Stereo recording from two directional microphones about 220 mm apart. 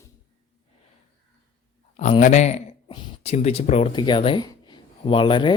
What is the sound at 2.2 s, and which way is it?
Speech, 30° left (ahead or behind).